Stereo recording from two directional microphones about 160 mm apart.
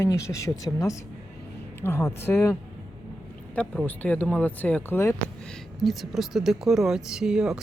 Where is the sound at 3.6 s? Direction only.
10° left (ahead or behind).